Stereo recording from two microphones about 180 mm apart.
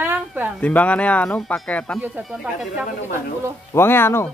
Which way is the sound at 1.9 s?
10° right (ahead or behind).